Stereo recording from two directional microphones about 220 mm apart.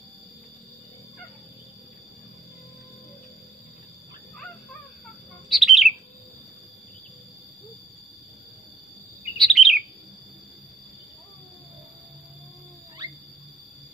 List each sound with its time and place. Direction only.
5.5 s bird: centre (ahead or behind)
9.4 s chirp: centre (ahead or behind)